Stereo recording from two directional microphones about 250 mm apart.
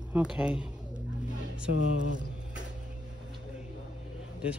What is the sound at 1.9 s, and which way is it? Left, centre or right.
Mantra, right.